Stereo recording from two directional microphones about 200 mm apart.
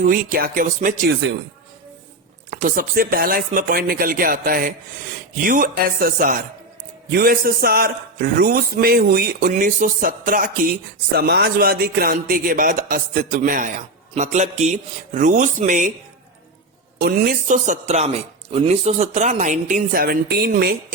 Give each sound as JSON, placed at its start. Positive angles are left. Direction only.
{"t": 0.0, "sound": "a man's voice", "side_deg": -45}
{"t": 2.5, "sound": "a man's voice", "side_deg": -40}
{"t": 17.0, "sound": "speech", "side_deg": -50}